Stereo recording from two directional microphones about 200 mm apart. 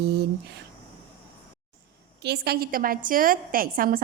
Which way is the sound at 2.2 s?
55° right (ahead or behind).